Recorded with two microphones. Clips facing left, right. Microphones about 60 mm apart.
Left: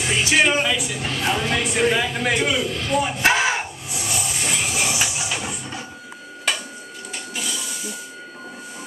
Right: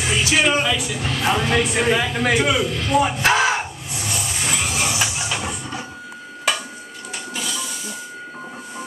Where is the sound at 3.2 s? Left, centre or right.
Centre.